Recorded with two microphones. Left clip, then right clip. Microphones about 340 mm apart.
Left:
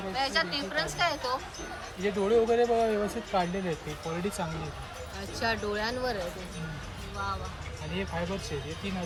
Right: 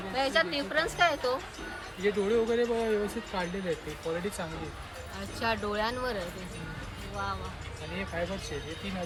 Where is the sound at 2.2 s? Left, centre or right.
Left.